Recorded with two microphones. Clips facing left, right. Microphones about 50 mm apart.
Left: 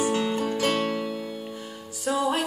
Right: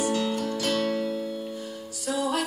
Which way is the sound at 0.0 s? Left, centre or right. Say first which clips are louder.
Left 2 dB; left.